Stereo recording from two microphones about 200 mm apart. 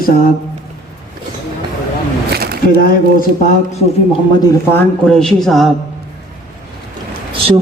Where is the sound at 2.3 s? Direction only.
50° right (ahead or behind).